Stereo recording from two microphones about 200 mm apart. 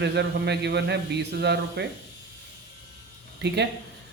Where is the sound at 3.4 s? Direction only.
55° right (ahead or behind).